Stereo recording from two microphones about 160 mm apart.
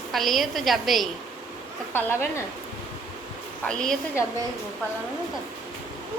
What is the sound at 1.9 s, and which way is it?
Speech, 15° left (ahead or behind).